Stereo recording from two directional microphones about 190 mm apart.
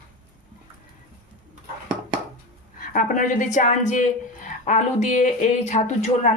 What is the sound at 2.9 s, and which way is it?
A woman's voice, 45° left (ahead or behind).